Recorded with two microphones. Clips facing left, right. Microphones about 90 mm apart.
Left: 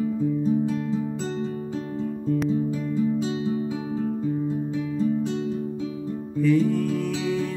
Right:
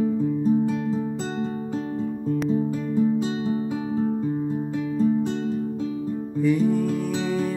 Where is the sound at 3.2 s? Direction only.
45° right (ahead or behind).